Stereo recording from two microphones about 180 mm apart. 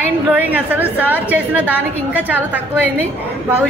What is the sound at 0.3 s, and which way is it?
A woman's voice, 10° right (ahead or behind).